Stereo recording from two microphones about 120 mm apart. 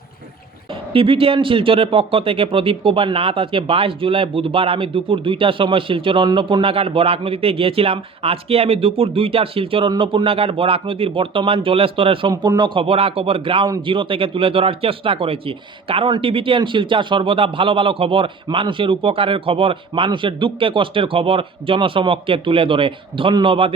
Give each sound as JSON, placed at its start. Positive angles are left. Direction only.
{"t": 0.7, "sound": "speech", "side_deg": -50}
{"t": 12.3, "sound": "speech", "side_deg": -35}